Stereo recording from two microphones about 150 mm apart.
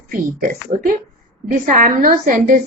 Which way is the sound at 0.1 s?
65° right (ahead or behind).